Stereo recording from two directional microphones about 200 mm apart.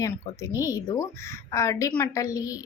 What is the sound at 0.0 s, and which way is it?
A woman's voice, 15° left (ahead or behind).